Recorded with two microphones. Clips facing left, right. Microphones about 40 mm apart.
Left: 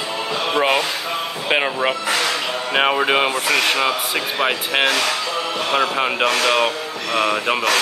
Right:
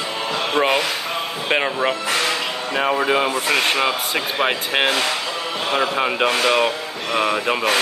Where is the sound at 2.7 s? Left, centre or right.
Left.